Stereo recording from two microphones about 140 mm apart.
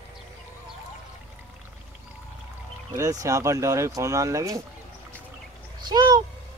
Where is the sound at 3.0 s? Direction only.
25° right (ahead or behind).